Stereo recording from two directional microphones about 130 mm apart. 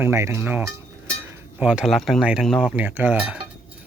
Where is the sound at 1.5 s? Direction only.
10° right (ahead or behind).